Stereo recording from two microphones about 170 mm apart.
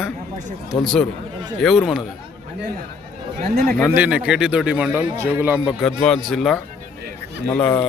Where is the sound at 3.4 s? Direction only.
60° right (ahead or behind).